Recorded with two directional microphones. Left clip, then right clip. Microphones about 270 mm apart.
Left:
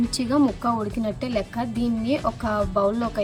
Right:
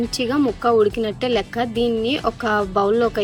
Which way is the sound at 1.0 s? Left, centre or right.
Centre.